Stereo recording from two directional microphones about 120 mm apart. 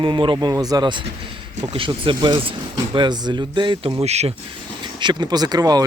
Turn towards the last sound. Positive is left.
turn(degrees=-30)  # may be behind; listen again after turning